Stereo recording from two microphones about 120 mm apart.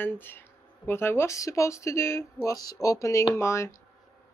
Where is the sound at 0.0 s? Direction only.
15° left (ahead or behind).